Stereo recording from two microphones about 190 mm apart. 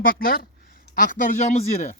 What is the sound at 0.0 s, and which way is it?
Speech, 50° left (ahead or behind).